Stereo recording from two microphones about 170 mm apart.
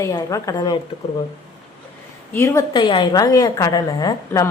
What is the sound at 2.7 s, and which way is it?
A woman's voice, 30° left (ahead or behind).